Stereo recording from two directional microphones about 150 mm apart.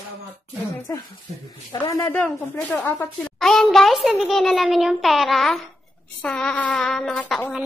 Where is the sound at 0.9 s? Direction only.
15° left (ahead or behind); by 7.3 s centre (ahead or behind).